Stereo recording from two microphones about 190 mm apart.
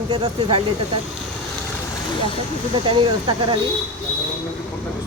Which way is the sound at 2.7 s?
25° right (ahead or behind).